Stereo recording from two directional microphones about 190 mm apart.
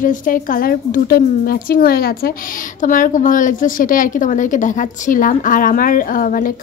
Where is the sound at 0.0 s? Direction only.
45° left (ahead or behind).